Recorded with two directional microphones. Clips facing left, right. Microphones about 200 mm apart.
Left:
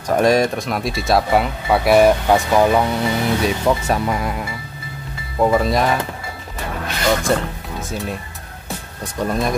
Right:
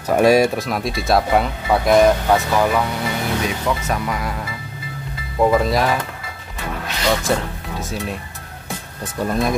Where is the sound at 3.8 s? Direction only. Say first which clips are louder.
Left 3 dB; 30° left (ahead or behind).